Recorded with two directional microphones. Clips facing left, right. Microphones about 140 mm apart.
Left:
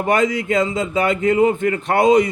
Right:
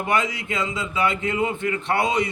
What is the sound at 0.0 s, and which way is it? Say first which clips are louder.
A man's voice: left 6 dB; 45° left (ahead or behind).